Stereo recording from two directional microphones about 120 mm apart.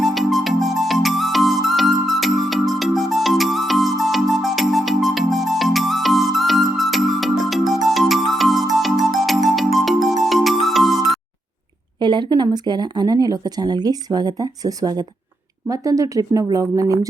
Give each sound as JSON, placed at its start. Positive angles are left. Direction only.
{"t": 0.0, "sound": "music", "side_deg": 0}
{"t": 11.9, "sound": "speech", "side_deg": -40}